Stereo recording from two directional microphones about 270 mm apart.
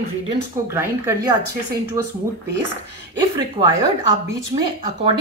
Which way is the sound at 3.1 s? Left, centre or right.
Centre.